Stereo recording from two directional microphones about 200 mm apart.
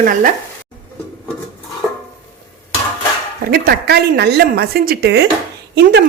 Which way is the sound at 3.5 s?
50° right (ahead or behind).